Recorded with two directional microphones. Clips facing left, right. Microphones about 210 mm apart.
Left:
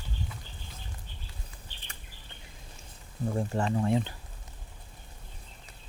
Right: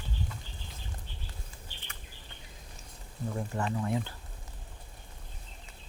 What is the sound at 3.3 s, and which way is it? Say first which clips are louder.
Speech: left 4 dB; 30° left (ahead or behind).